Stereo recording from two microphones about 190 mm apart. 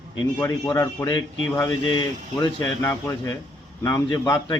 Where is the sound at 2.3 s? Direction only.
15° left (ahead or behind).